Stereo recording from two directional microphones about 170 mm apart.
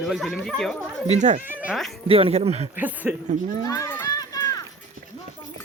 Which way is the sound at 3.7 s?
15° left (ahead or behind).